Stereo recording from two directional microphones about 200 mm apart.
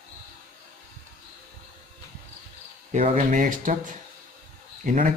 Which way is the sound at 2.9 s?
40° right (ahead or behind).